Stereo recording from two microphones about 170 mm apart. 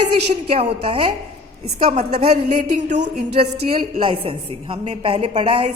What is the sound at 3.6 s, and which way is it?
A woman's voice, 30° right (ahead or behind).